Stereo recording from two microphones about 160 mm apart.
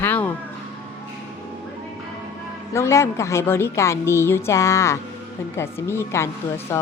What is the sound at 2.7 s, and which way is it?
Speech, 15° left (ahead or behind).